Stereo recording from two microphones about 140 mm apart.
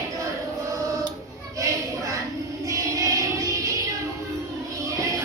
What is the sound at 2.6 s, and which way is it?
Child singing, 25° right (ahead or behind).